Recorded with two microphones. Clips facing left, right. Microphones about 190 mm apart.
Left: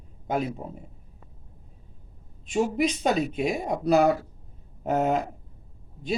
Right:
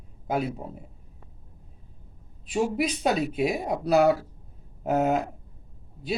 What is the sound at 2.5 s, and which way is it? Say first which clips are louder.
Speech: left 1 dB; centre (ahead or behind).